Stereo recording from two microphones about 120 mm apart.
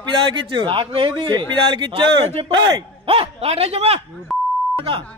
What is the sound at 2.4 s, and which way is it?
A man's voice, 50° right (ahead or behind).